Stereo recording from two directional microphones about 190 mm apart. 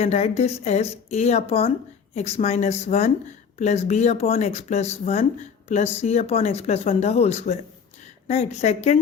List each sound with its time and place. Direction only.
0.0 s speech: 35° left (ahead or behind)